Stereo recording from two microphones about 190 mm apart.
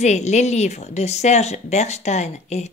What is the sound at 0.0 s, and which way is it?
A woman's voice, 35° left (ahead or behind).